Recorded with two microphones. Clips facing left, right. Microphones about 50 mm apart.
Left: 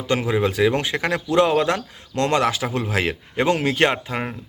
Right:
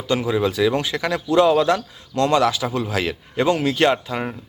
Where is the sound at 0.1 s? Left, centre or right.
Left.